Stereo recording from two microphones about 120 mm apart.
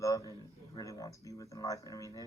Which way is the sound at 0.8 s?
30° left (ahead or behind).